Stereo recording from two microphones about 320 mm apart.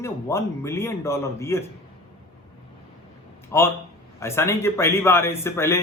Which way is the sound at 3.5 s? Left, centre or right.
Centre.